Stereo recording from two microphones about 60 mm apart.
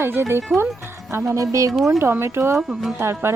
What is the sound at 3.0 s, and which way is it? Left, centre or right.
Speech, right.